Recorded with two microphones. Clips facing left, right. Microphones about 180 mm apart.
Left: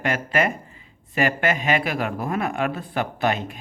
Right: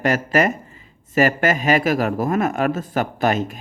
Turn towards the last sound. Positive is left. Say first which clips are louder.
# right 4 dB
turn(degrees=-45)  # may be behind; listen again after turning